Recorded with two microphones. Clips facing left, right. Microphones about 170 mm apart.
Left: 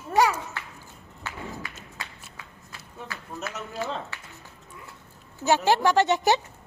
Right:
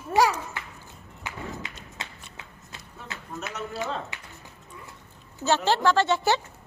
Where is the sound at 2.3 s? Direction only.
25° right (ahead or behind).